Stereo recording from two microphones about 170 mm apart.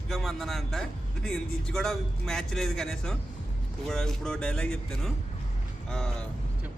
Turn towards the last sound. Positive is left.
turn(degrees=5)  # may be behind; listen again after turning